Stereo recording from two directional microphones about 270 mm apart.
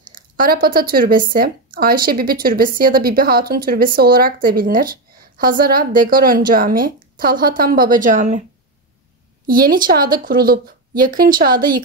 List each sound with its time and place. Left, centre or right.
0.0 s speech: right
9.5 s speech: right